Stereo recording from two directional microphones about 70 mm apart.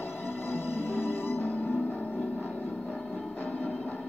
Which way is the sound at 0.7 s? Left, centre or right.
Left.